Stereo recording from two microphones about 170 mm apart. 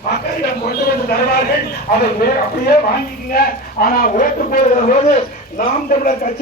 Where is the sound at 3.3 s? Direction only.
60° left (ahead or behind).